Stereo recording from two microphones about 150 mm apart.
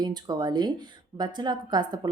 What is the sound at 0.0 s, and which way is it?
Speech, 30° right (ahead or behind).